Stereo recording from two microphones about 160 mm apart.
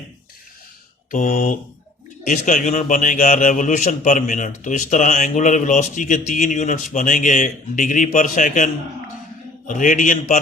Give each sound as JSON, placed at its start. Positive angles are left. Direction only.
{"t": 1.1, "sound": "a man's voice", "side_deg": 55}